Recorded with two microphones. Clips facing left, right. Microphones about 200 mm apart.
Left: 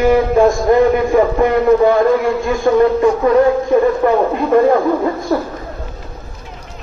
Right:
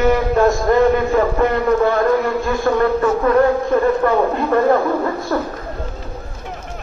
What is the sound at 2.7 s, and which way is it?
Speech, 15° left (ahead or behind).